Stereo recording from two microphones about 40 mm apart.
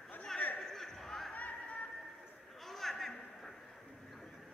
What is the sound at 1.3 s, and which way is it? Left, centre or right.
Music, left.